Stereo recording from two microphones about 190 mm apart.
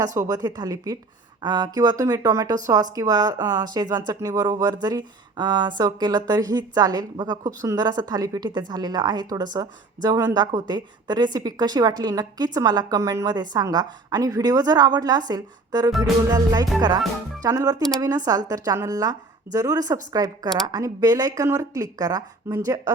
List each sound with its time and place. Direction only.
0.0 s speech: 20° right (ahead or behind)
15.9 s music: centre (ahead or behind)
16.3 s speech: 20° right (ahead or behind)